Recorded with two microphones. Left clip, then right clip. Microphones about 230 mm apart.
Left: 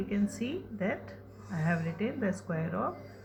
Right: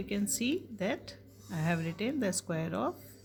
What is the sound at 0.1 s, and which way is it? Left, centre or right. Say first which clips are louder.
Speech: right 1 dB; right.